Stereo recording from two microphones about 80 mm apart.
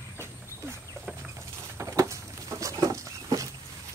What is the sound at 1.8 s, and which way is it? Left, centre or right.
Patter, right.